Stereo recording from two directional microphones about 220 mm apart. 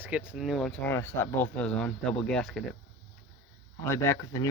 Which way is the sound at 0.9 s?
10° left (ahead or behind).